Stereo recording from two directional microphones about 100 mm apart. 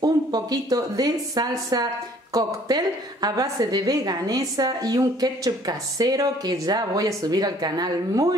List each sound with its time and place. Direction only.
0.0 s a woman's voice: 40° right (ahead or behind)